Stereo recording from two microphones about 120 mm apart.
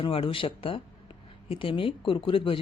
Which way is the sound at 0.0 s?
50° left (ahead or behind).